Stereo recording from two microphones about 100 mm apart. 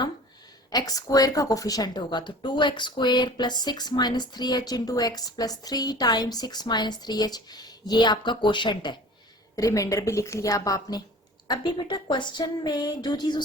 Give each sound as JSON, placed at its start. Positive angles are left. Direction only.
{"t": 0.7, "sound": "a woman's voice", "side_deg": 40}
{"t": 9.6, "sound": "a woman's voice", "side_deg": 35}